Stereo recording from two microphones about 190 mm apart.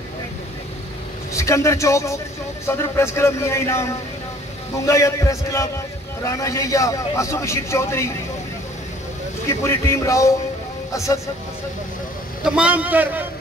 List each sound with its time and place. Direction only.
1.3 s a man's voice: 15° left (ahead or behind)
9.5 s a man's voice: 15° left (ahead or behind)
12.4 s a man's voice: 5° right (ahead or behind)